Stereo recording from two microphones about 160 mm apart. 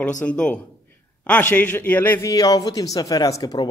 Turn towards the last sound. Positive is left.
turn(degrees=20)  # may be behind; listen again after turning